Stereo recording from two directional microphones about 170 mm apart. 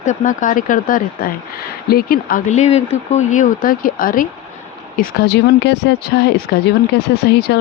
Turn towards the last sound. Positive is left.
turn(degrees=75)  # may be behind; listen again after turning